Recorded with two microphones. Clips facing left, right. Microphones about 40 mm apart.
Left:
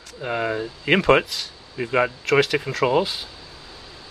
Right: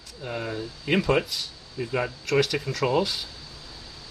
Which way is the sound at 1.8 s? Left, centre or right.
Left.